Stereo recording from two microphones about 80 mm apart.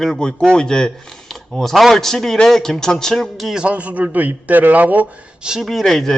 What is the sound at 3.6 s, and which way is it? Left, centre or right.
A man's voice, centre.